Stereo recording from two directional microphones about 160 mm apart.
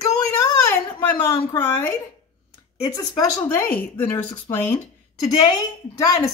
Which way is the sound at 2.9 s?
25° left (ahead or behind).